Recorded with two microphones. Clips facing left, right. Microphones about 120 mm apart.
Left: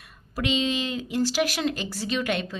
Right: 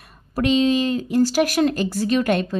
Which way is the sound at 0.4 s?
45° right (ahead or behind).